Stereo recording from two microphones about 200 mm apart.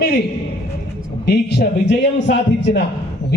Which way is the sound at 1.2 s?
55° left (ahead or behind).